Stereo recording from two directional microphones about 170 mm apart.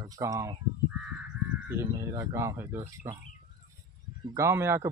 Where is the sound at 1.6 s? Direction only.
15° right (ahead or behind).